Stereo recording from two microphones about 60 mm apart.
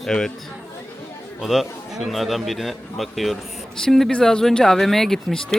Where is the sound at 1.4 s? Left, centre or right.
Centre.